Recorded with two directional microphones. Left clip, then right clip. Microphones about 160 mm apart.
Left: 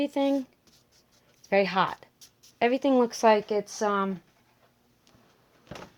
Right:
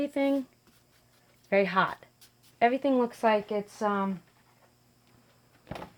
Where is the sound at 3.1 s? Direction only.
80° left.